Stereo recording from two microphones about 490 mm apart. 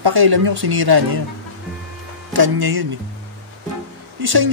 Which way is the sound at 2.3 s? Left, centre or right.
Right.